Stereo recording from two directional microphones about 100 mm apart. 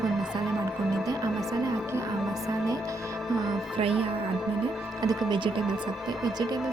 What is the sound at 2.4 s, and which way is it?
Speech, 35° right (ahead or behind).